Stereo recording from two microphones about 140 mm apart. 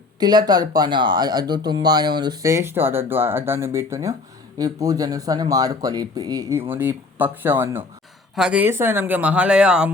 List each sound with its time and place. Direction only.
0.2 s speech: 30° right (ahead or behind)
6.6 s speech: 15° right (ahead or behind)